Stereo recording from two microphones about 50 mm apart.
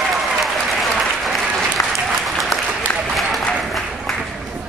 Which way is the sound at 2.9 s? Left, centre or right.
Left.